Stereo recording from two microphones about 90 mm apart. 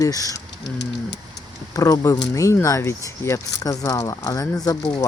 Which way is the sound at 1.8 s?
40° left (ahead or behind).